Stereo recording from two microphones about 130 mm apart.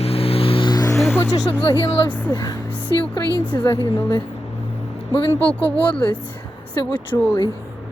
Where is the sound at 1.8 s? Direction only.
40° left (ahead or behind).